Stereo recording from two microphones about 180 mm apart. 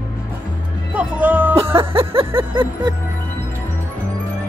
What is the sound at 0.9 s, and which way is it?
Speech, 10° right (ahead or behind).